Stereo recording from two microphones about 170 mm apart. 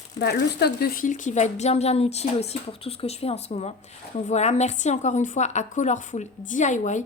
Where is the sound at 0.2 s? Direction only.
75° left (ahead or behind).